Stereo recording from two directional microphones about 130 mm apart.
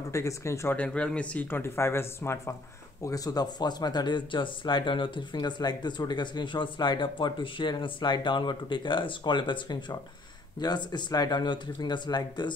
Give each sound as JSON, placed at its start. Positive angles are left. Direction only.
{"t": 0.1, "sound": "speech", "side_deg": 25}
{"t": 0.7, "sound": "speech", "side_deg": 10}